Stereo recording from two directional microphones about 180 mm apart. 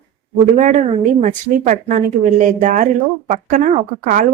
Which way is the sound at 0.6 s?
45° right (ahead or behind).